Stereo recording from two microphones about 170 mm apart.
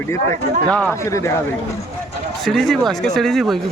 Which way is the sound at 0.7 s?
10° left (ahead or behind).